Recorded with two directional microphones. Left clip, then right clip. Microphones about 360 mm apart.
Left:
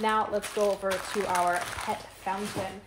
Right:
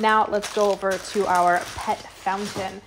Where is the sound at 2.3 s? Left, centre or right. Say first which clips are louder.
Right 7 dB; right.